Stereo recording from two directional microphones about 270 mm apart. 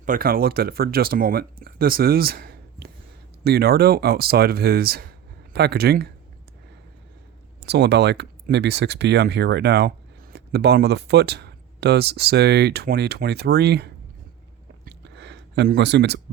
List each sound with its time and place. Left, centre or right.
0.0 s speech: right
7.6 s speech: right
14.8 s a sound: right